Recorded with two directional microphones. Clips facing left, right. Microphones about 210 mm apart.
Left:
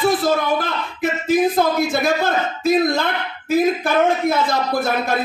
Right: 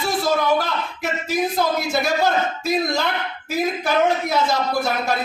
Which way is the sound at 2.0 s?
50° left (ahead or behind).